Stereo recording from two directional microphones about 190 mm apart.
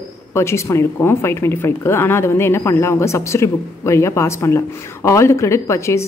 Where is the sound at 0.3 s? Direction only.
15° left (ahead or behind).